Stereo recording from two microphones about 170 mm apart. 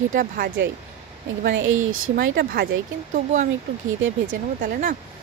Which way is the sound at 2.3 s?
60° right (ahead or behind).